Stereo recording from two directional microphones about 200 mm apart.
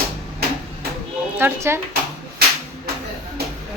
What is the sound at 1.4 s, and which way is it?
Speech, 10° right (ahead or behind).